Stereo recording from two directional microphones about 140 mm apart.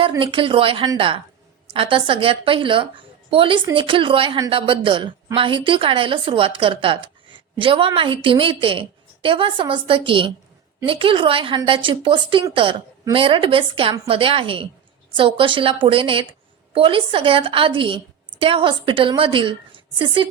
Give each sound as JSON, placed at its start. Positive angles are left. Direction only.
{"t": 0.2, "sound": "a woman's voice", "side_deg": -40}